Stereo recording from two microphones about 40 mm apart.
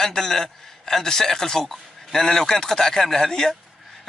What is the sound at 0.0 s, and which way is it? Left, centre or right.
Speech, centre.